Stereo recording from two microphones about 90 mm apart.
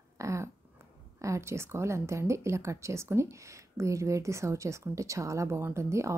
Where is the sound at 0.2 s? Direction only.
35° right (ahead or behind).